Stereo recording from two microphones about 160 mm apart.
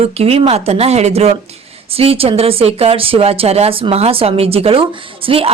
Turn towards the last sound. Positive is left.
turn(degrees=-35)  # may be behind; listen again after turning